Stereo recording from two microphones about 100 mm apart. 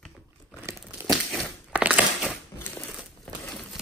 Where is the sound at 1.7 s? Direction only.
15° right (ahead or behind).